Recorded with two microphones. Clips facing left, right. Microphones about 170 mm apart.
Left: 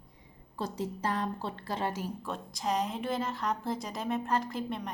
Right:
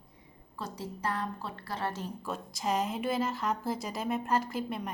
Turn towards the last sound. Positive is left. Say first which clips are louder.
# even
turn(degrees=-5)  # may be behind; listen again after turning